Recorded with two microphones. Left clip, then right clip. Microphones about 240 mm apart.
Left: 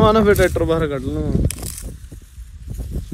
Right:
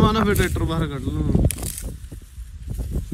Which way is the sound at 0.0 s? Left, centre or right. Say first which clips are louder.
Left 7 dB; centre.